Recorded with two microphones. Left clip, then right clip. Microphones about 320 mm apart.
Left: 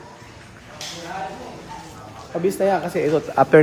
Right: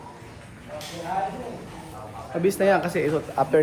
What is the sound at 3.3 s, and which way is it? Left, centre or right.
Speech, left.